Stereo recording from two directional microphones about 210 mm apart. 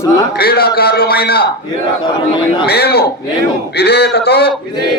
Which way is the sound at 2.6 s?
50° left (ahead or behind).